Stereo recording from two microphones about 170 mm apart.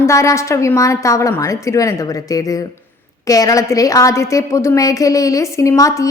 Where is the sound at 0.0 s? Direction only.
15° left (ahead or behind).